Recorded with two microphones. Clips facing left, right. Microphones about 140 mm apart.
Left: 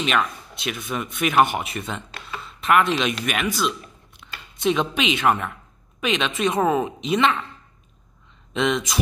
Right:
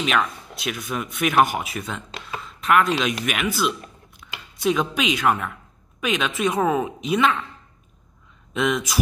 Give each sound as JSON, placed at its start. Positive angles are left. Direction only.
{"t": 0.0, "sound": "speech", "side_deg": 0}
{"t": 4.2, "sound": "a sound", "side_deg": 0}
{"t": 4.6, "sound": "speech", "side_deg": 0}
{"t": 8.5, "sound": "speech", "side_deg": 0}